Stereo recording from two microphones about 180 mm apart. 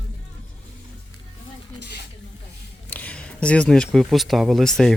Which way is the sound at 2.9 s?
10° left (ahead or behind).